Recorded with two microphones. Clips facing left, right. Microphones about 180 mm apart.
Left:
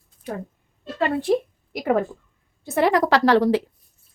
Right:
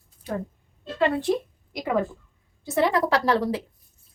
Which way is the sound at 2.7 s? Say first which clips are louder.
Left 3 dB; 75° left (ahead or behind).